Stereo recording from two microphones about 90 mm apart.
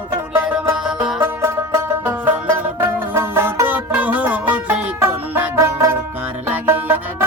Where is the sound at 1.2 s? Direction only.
30° right (ahead or behind).